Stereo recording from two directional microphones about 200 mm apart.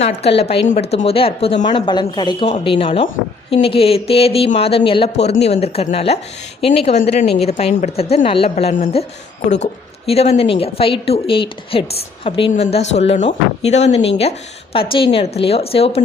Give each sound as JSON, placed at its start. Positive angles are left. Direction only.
{"t": 0.0, "sound": "a woman's voice", "side_deg": 30}
{"t": 10.1, "sound": "a woman's voice", "side_deg": 30}